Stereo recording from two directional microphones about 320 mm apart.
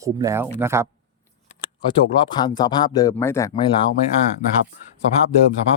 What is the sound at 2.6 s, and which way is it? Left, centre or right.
Speech, centre.